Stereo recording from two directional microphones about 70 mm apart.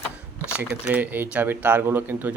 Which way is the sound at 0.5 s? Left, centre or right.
Right.